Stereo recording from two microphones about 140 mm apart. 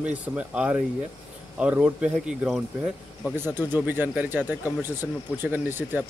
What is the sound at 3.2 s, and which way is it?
Speech, 15° right (ahead or behind).